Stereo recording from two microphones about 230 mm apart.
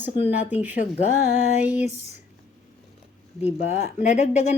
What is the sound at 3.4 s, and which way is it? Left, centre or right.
Speech, left.